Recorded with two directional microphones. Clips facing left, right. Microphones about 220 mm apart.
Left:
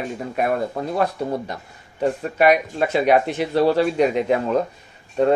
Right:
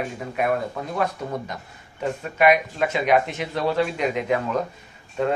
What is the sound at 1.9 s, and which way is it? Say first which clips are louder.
Speech: left 4 dB; 35° left (ahead or behind).